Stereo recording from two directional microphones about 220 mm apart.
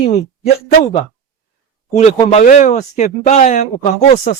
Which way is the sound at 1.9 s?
30° left (ahead or behind).